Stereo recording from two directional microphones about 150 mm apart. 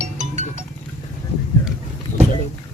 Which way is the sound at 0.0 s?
50° right (ahead or behind).